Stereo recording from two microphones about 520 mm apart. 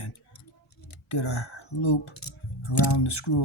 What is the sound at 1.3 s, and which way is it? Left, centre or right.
Speech, left.